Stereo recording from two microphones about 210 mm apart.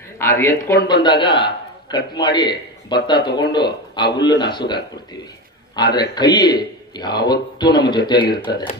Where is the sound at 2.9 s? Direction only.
20° left (ahead or behind).